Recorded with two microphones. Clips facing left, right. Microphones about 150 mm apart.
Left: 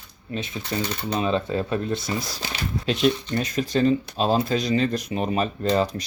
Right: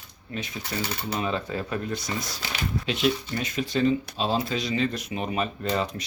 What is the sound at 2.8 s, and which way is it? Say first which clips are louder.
Speech: left 5 dB; 40° left (ahead or behind).